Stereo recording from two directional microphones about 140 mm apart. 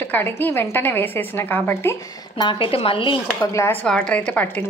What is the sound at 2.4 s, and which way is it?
Speech, 40° left (ahead or behind).